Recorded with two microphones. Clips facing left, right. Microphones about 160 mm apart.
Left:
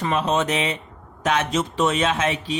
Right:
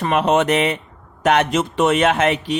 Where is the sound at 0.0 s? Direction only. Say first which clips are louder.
Right 5 dB; 65° right (ahead or behind).